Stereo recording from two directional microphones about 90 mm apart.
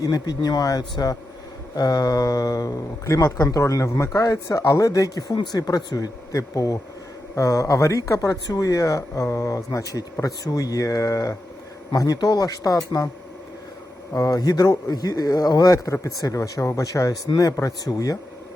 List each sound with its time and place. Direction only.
0.0 s a man's voice: 45° left (ahead or behind)
14.1 s a man's voice: 40° left (ahead or behind)